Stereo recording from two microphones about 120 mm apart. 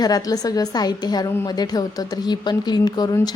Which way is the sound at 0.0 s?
30° left (ahead or behind).